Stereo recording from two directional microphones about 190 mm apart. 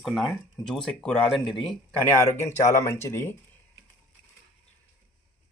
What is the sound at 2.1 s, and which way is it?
Speech, 15° left (ahead or behind).